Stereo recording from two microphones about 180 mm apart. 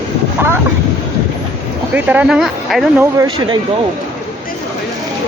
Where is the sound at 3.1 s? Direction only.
25° right (ahead or behind).